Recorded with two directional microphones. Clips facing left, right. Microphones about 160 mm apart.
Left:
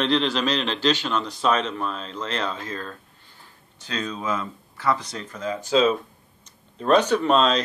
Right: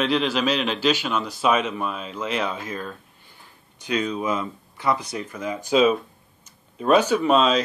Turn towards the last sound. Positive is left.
turn(degrees=-5)  # may be behind; listen again after turning